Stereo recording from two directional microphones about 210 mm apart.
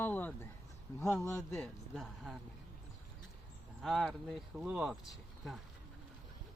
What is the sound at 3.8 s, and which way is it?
Speech, centre (ahead or behind).